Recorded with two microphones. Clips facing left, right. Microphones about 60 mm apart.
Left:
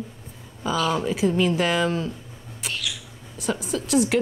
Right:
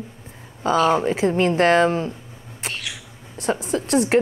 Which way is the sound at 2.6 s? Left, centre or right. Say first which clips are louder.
Even; right.